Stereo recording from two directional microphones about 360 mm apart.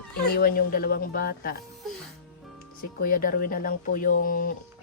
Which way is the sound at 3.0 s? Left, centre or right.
Left.